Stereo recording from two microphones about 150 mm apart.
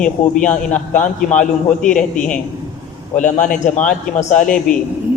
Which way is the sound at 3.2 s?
55° left (ahead or behind).